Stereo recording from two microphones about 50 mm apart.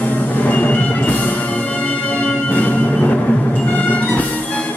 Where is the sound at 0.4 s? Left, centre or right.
Left.